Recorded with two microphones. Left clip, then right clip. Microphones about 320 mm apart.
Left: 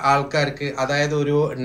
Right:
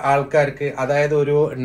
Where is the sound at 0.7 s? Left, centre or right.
Right.